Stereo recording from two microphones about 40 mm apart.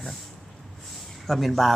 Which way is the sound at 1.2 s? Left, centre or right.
Centre.